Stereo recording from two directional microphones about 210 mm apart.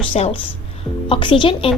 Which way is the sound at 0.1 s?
30° left (ahead or behind).